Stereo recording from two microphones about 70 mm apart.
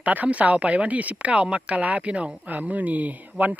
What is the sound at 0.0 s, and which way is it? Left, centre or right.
Speech, right.